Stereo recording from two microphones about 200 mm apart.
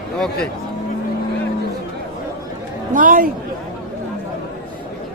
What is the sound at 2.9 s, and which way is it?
Speech, 45° right (ahead or behind).